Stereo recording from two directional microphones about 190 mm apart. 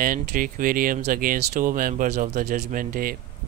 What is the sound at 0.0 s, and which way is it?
Speech, 45° right (ahead or behind).